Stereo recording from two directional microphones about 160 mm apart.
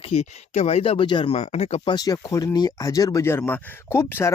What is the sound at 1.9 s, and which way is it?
Speech, 25° left (ahead or behind).